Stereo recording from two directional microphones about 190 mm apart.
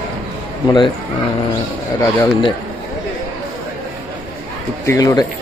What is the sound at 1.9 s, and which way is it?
Speech, 15° left (ahead or behind).